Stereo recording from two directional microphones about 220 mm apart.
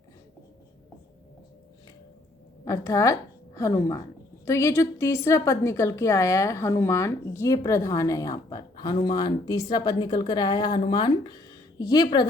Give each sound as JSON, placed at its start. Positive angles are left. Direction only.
{"t": 2.6, "sound": "a woman's voice", "side_deg": 15}